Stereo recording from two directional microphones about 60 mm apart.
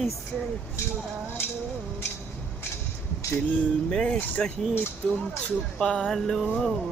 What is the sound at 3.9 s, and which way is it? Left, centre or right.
Speech, centre.